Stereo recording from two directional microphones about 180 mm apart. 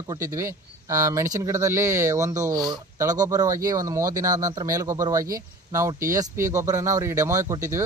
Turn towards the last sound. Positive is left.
turn(degrees=-15)  # may be behind; listen again after turning